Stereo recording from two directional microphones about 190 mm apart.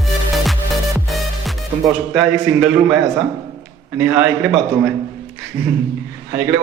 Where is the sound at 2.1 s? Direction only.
5° right (ahead or behind).